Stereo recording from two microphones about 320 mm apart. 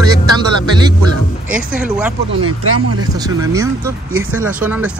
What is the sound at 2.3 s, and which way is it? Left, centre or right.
Speech, right.